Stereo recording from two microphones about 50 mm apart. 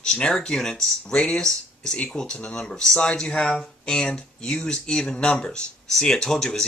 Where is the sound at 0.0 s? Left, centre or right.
Centre.